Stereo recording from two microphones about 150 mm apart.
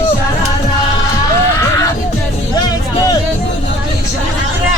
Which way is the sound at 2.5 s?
25° left (ahead or behind).